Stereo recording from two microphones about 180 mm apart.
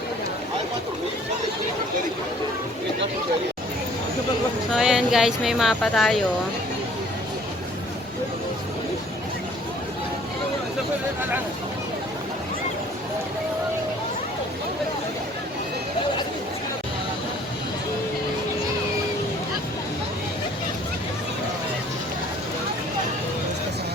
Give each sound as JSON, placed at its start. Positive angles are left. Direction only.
{"t": 4.7, "sound": "a woman's voice", "side_deg": 0}